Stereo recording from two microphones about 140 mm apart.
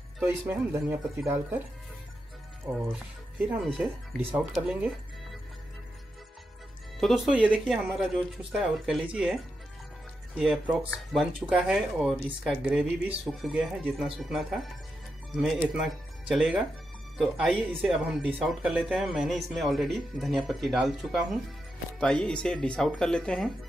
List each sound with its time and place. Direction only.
0.3 s speech: 15° right (ahead or behind)
2.9 s speech: 10° right (ahead or behind)
7.0 s speech: 5° right (ahead or behind)